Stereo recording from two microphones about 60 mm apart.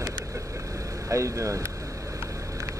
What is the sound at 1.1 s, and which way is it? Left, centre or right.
Speech, right.